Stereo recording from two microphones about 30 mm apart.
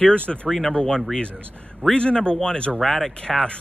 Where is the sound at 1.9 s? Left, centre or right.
Left.